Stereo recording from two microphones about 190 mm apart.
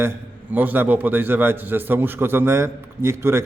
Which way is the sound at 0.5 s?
10° right (ahead or behind).